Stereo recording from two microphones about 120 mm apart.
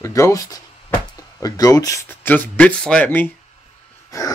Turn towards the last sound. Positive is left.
turn(degrees=30)  # may be behind; listen again after turning